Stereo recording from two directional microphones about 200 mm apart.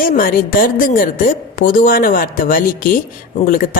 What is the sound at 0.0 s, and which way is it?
A woman's voice, 45° left (ahead or behind).